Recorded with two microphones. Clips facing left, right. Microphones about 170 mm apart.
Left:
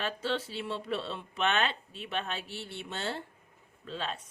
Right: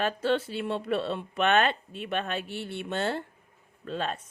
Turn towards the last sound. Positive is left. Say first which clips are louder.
# right 5 dB
turn(degrees=-50)  # may be behind; listen again after turning